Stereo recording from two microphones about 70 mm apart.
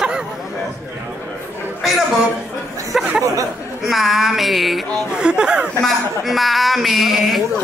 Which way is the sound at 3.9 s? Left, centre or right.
Centre.